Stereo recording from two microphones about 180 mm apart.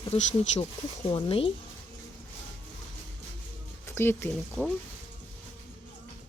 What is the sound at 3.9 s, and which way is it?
Speech, 10° left (ahead or behind).